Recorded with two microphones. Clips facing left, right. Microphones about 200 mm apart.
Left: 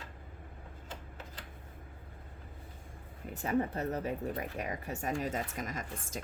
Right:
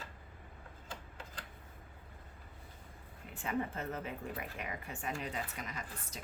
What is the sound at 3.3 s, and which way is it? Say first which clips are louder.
Speech: left 6 dB; 40° left (ahead or behind).